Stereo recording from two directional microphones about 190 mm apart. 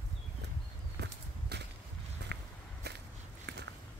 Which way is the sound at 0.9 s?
60° right (ahead or behind).